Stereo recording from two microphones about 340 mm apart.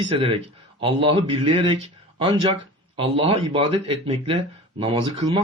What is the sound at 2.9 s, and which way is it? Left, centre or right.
Speech, centre.